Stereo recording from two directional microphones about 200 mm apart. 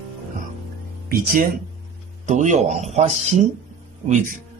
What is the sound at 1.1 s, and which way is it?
Speech, 50° right (ahead or behind).